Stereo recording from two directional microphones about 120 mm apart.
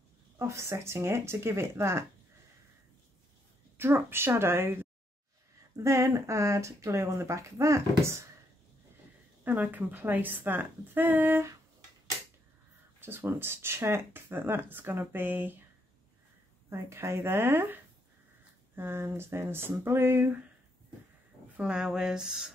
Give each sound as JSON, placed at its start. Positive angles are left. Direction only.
{"t": 0.4, "sound": "speech", "side_deg": -25}
{"t": 3.7, "sound": "speech", "side_deg": -20}
{"t": 9.4, "sound": "a woman's voice", "side_deg": -15}
{"t": 13.0, "sound": "speech", "side_deg": -20}
{"t": 16.6, "sound": "speech", "side_deg": -25}
{"t": 18.8, "sound": "speech", "side_deg": -20}
{"t": 21.5, "sound": "speech", "side_deg": -10}